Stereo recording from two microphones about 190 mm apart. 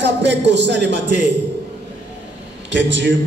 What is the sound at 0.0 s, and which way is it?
Speech, 70° right (ahead or behind).